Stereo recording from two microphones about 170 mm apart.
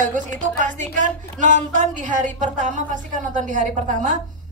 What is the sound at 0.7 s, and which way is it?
A woman's voice, 50° right (ahead or behind).